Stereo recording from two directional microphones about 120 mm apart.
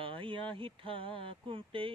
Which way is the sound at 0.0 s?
45° right (ahead or behind).